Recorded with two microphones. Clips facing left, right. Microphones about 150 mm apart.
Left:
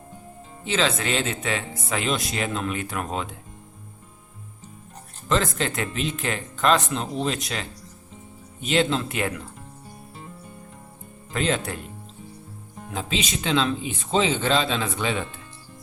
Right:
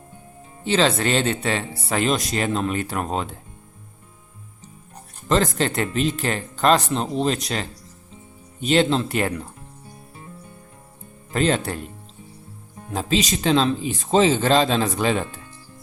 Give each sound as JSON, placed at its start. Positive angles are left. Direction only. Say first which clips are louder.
{"t": 0.6, "sound": "speech", "louder": "right 5 dB", "side_deg": -35}
{"t": 5.3, "sound": "speech", "louder": "right 4 dB", "side_deg": -35}
{"t": 11.3, "sound": "speech", "louder": "right 4 dB", "side_deg": -40}
{"t": 12.9, "sound": "speech", "louder": "right 6 dB", "side_deg": -40}